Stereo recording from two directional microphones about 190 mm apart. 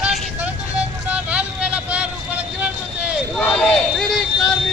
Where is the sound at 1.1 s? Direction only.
5° right (ahead or behind).